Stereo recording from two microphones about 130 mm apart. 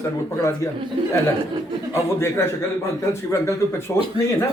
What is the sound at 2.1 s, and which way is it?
Speech, 20° left (ahead or behind).